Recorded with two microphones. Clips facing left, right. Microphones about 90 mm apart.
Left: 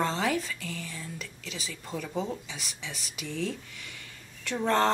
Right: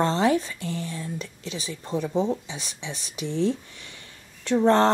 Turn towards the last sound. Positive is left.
turn(degrees=-30)  # may be behind; listen again after turning